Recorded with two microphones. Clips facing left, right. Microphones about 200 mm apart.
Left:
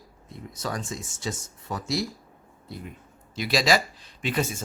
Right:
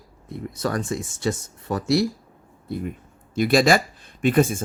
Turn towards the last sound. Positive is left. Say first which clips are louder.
# right 9 dB
turn(degrees=-50)  # may be behind; listen again after turning